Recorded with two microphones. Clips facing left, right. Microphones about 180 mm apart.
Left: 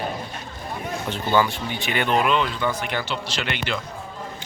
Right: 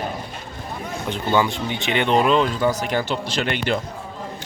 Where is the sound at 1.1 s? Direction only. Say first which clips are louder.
Right 1 dB; 20° right (ahead or behind); by 3.7 s 45° right (ahead or behind).